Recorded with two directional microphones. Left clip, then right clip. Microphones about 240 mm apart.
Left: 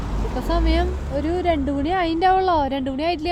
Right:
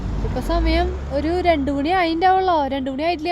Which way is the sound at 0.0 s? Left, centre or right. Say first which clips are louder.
Even; left.